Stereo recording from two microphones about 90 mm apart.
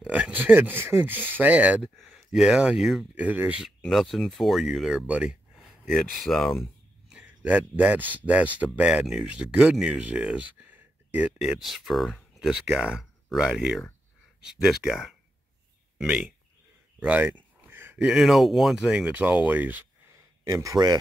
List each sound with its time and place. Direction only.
0.0 s speech: 15° right (ahead or behind)
2.0 s speech: centre (ahead or behind); by 3.6 s 15° right (ahead or behind)
3.9 s speech: centre (ahead or behind)
7.1 s speech: 10° right (ahead or behind)
17.0 s a sound: 20° right (ahead or behind)
17.9 s speech: 5° right (ahead or behind)
20.1 s a sound: 35° right (ahead or behind)